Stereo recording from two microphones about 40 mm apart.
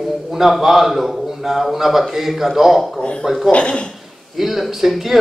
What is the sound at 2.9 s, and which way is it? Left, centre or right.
Speech, left.